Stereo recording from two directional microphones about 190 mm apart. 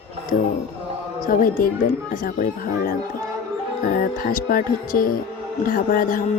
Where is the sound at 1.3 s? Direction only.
45° left (ahead or behind).